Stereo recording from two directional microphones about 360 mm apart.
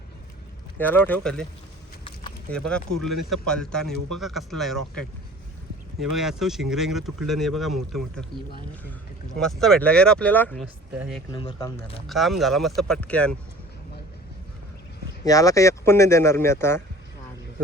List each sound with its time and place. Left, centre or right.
0.8 s speech: centre
2.5 s speech: centre
9.3 s speech: centre
11.3 s speech: centre
12.0 s speech: centre
15.2 s speech: centre